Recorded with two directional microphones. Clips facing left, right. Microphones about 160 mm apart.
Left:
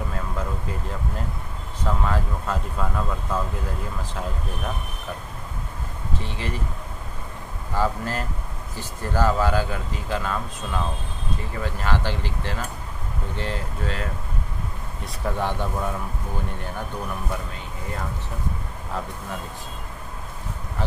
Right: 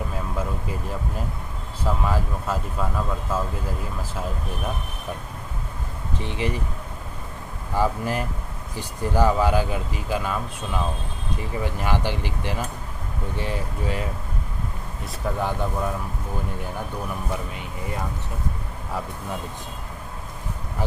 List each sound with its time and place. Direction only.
1.9 s speech: 10° right (ahead or behind)
6.2 s speech: 15° right (ahead or behind)
7.7 s speech: 15° right (ahead or behind)
15.3 s speech: centre (ahead or behind)